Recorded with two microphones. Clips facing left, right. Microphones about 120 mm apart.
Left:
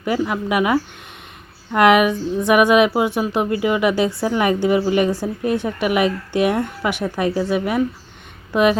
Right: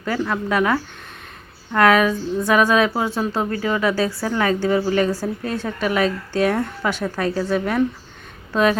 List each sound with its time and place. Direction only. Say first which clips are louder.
0.0 s a woman's voice: left 2 dB; 15° left (ahead or behind)